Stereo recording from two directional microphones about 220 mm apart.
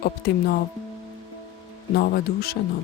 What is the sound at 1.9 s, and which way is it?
Speech, 45° left (ahead or behind).